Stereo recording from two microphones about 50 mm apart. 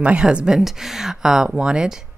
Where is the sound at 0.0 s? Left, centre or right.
Right.